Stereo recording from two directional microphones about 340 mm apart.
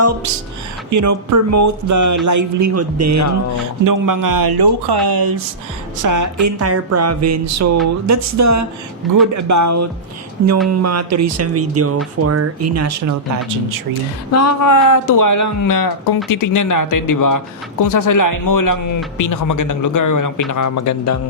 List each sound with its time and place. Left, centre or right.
0.9 s speech: right
2.2 s music: right
3.8 s a man's voice: right
6.0 s music: right
14.3 s speech: left